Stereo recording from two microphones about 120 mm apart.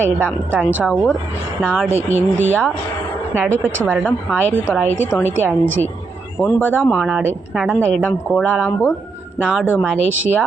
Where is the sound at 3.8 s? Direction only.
15° right (ahead or behind).